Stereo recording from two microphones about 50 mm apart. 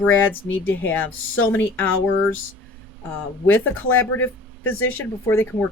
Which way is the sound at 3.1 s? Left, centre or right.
Left.